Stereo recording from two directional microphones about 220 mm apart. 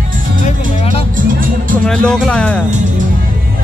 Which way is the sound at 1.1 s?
40° right (ahead or behind).